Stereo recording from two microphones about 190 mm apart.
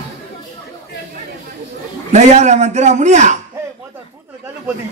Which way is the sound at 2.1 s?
40° right (ahead or behind).